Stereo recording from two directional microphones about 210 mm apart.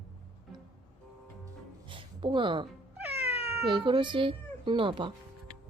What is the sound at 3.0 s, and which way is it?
Cat, 5° right (ahead or behind).